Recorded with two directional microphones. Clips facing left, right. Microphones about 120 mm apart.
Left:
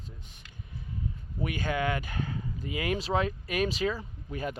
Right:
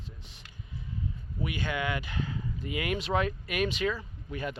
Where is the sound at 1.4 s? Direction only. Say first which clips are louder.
Left 2 dB; 40° left (ahead or behind).